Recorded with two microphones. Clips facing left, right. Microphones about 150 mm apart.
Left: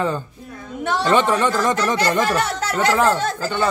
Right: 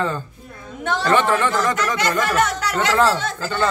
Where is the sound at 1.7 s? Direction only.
35° left (ahead or behind).